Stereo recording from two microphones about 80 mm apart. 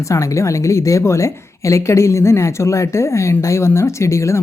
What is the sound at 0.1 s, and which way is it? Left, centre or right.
Speech, left.